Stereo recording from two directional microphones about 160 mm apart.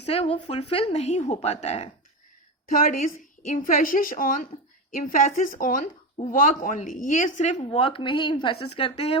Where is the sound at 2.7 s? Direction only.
60° left (ahead or behind).